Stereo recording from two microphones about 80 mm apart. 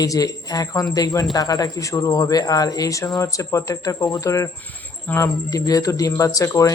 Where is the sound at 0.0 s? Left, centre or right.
Left.